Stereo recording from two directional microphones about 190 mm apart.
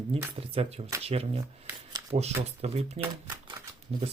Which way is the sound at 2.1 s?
35° right (ahead or behind).